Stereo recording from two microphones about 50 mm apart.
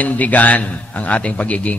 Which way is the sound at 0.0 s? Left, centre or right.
Left.